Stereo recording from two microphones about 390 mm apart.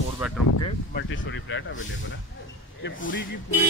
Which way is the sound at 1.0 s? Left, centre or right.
Left.